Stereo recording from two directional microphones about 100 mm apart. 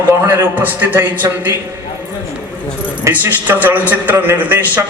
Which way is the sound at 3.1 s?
20° right (ahead or behind).